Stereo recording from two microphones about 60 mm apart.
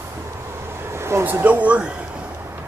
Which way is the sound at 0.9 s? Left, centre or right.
Right.